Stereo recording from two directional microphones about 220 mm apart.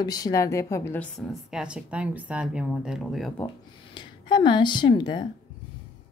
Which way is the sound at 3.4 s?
20° left (ahead or behind).